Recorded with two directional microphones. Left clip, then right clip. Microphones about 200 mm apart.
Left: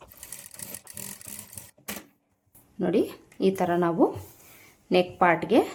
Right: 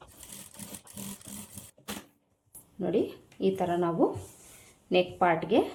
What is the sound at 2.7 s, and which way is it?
A woman's voice, 25° left (ahead or behind).